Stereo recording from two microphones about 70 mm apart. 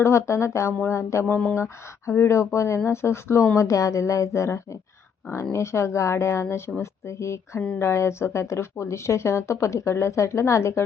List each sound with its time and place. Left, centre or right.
0.0 s speech: left